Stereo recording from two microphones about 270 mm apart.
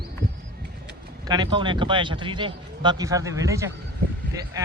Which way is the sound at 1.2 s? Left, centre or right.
Centre.